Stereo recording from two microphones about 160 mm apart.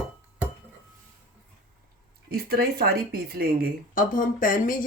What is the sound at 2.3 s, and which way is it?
Speech, 75° right (ahead or behind).